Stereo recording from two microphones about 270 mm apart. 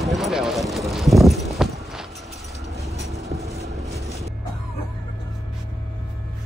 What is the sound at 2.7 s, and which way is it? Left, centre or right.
Vehicle, right.